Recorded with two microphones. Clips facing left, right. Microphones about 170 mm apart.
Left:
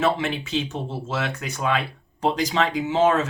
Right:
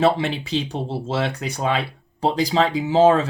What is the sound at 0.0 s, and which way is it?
Speech, 35° right (ahead or behind).